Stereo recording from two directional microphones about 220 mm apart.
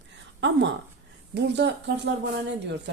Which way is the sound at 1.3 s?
50° right (ahead or behind).